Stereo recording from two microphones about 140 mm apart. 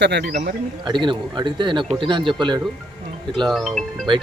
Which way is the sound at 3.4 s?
Centre (ahead or behind).